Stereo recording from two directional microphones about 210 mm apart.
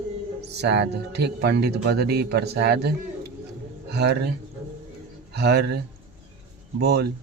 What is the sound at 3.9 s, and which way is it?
Speech, 50° right (ahead or behind).